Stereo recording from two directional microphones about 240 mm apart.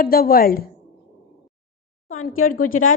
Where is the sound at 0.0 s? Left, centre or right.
Left.